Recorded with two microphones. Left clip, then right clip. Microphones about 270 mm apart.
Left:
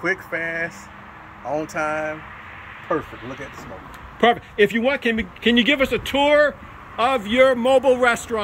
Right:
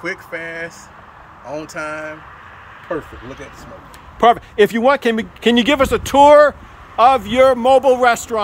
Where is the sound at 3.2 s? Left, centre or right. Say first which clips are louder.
Even; right.